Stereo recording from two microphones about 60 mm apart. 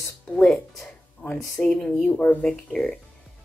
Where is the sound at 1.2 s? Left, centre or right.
Left.